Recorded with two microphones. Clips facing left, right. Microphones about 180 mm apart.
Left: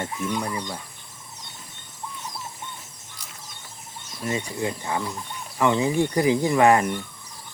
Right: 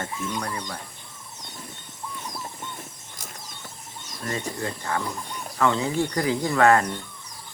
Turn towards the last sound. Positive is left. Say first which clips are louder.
# left 1 dB
turn(degrees=15)  # may be behind; listen again after turning